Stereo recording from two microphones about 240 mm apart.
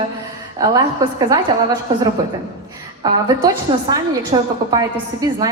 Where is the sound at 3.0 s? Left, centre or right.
Centre.